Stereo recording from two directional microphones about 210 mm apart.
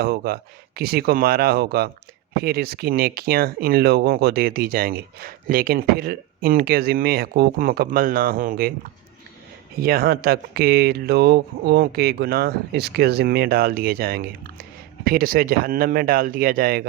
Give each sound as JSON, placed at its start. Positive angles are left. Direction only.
{"t": 0.0, "sound": "speech", "side_deg": -45}